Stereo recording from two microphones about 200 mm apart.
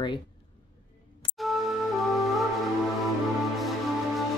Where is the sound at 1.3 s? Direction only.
Centre (ahead or behind).